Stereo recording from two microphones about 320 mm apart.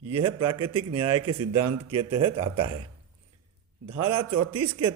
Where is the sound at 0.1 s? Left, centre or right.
Right.